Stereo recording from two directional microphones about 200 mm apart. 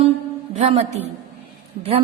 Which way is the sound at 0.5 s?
35° right (ahead or behind).